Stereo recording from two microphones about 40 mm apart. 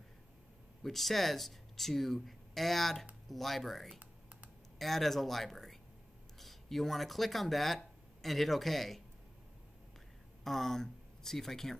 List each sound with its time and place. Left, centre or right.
0.8 s speech: centre
3.9 s computer keyboard: right
4.7 s speech: centre
10.4 s speech: centre